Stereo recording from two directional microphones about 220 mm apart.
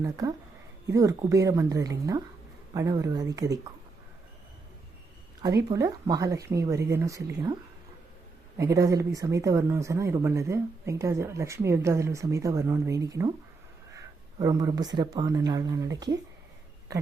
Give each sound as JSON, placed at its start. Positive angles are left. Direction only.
{"t": 0.0, "sound": "speech", "side_deg": -15}
{"t": 5.6, "sound": "speech", "side_deg": -15}